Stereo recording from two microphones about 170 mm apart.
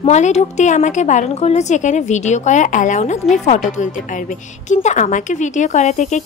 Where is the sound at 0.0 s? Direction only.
40° left (ahead or behind).